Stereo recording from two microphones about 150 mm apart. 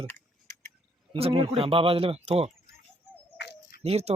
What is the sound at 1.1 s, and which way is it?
Speech, 35° right (ahead or behind).